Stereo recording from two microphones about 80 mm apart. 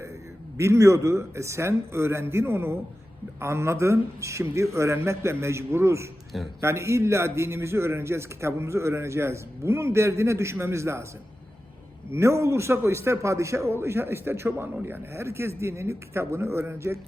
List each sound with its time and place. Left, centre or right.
0.5 s a man's voice: right
12.1 s a man's voice: right